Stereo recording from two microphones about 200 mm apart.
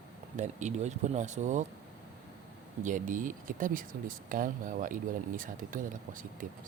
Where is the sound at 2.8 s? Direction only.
40° right (ahead or behind).